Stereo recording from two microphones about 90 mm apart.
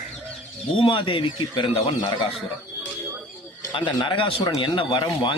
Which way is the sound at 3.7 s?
60° left (ahead or behind).